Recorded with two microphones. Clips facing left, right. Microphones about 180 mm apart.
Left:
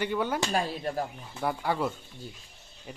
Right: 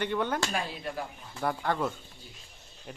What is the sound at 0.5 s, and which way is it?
Speech, 40° left (ahead or behind).